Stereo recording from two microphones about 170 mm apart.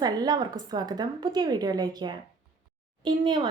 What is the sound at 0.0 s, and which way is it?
Speech, 25° right (ahead or behind).